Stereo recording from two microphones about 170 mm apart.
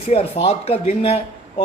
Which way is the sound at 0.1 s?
35° left (ahead or behind).